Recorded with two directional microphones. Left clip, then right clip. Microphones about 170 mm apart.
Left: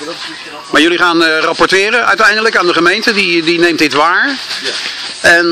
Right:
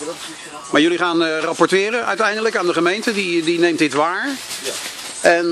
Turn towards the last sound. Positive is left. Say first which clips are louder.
# left 7 dB
turn(degrees=0)  # may be behind; listen again after turning